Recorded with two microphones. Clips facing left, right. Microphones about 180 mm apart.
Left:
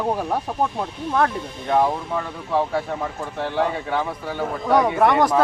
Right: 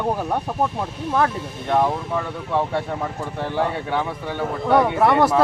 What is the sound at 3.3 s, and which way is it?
Speech, centre (ahead or behind).